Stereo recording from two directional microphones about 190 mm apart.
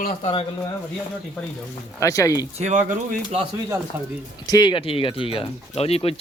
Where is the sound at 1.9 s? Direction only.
15° left (ahead or behind).